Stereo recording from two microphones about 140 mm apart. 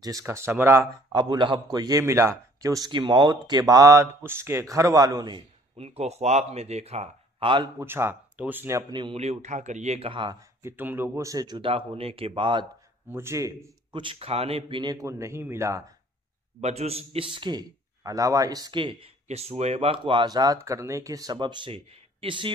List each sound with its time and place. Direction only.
0.0 s a man's voice: 20° right (ahead or behind)
1.1 s a man's voice: 30° right (ahead or behind)
5.8 s speech: 50° right (ahead or behind)
7.8 s speech: 15° right (ahead or behind)
8.9 s speech: 35° right (ahead or behind)
9.2 s speech: 55° right (ahead or behind); by 10.3 s 40° right (ahead or behind)
10.6 s speech: 15° right (ahead or behind); by 12.6 s 35° right (ahead or behind)
13.1 s a man's voice: 20° right (ahead or behind)
13.9 s speech: 40° right (ahead or behind); by 15.8 s 20° right (ahead or behind)
16.6 s speech: 50° right (ahead or behind)
19.2 s speech: 50° right (ahead or behind)